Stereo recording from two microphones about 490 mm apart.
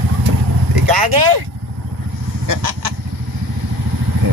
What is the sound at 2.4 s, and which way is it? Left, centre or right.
Goose, right.